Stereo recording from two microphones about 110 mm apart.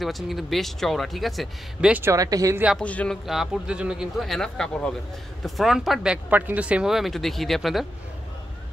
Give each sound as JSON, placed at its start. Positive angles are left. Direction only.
{"t": 0.0, "sound": "speech", "side_deg": 0}
{"t": 1.9, "sound": "speech", "side_deg": -15}
{"t": 2.1, "sound": "a woman's voice", "side_deg": -30}
{"t": 2.8, "sound": "speech", "side_deg": 10}
{"t": 3.3, "sound": "speech", "side_deg": -5}
{"t": 6.3, "sound": "speech", "side_deg": -15}